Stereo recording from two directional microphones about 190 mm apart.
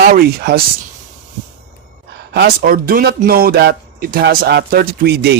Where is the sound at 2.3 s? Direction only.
50° right (ahead or behind).